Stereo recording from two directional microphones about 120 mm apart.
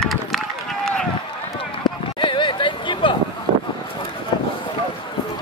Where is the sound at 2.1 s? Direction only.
45° left (ahead or behind).